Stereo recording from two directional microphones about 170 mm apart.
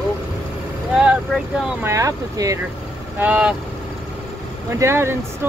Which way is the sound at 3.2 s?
10° right (ahead or behind).